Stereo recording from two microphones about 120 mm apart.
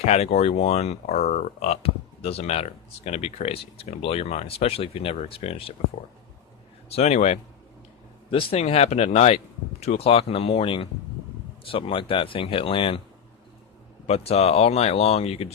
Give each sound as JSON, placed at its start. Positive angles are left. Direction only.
{"t": 0.0, "sound": "speech", "side_deg": 60}
{"t": 6.8, "sound": "speech", "side_deg": 65}
{"t": 8.3, "sound": "speech", "side_deg": 50}
{"t": 14.1, "sound": "speech", "side_deg": 60}